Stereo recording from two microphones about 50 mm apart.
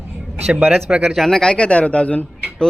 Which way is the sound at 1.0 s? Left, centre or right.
Centre.